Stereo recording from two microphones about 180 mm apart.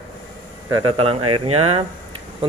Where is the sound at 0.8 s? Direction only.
30° right (ahead or behind).